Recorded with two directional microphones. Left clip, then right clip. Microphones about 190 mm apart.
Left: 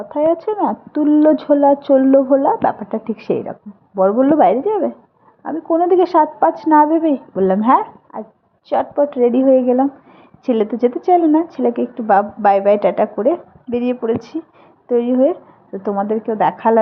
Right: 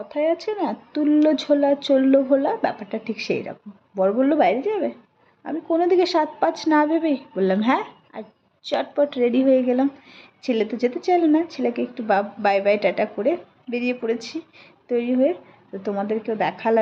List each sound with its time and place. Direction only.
0.1 s a woman's voice: centre (ahead or behind)